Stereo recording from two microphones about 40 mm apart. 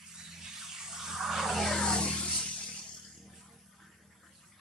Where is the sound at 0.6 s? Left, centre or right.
Centre.